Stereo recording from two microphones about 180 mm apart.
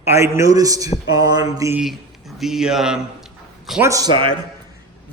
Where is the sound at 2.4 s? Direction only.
5° right (ahead or behind).